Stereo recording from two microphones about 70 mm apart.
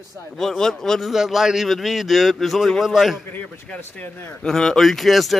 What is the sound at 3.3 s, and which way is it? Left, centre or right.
Speech, left.